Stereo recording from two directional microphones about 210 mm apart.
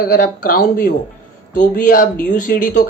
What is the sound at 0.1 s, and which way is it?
Speech, 40° left (ahead or behind).